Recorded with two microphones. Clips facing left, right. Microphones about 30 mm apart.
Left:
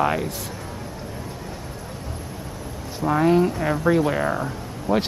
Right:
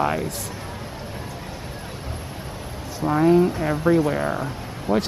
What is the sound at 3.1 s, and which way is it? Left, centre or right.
Speech, centre.